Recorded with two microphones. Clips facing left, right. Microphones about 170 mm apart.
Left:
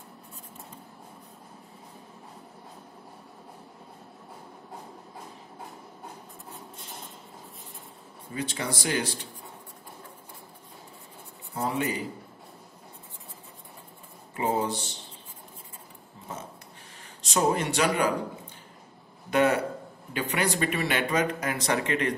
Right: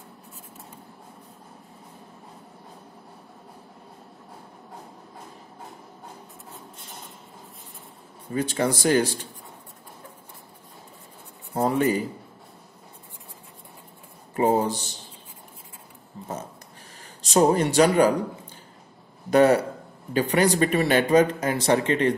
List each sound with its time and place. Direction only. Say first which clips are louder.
8.3 s speech: right 8 dB; 45° right (ahead or behind)
11.5 s a man's voice: right 7 dB; 40° right (ahead or behind)
14.3 s speech: right 6 dB; 45° right (ahead or behind)
16.2 s a sound: right 7 dB; 40° right (ahead or behind)
17.2 s speech: right 6 dB; 40° right (ahead or behind)
19.3 s speech: right 6 dB; 35° right (ahead or behind)